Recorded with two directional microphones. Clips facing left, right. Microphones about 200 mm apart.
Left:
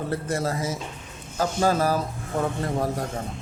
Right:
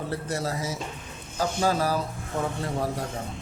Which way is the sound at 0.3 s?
50° left (ahead or behind).